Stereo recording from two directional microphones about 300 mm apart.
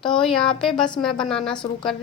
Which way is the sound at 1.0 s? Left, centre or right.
Centre.